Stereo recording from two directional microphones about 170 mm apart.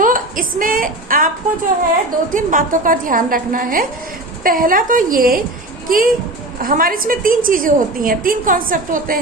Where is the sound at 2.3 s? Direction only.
50° right (ahead or behind).